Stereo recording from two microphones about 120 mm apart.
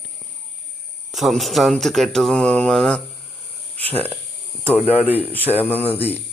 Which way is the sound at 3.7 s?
15° left (ahead or behind).